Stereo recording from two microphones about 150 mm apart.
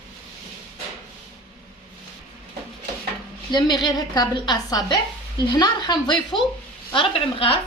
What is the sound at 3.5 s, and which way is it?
A woman's voice, 30° left (ahead or behind).